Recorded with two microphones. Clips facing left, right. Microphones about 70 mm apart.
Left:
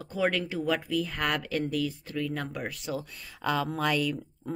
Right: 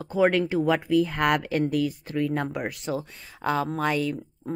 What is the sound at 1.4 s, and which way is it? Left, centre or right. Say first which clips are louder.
Speech: right 5 dB; right.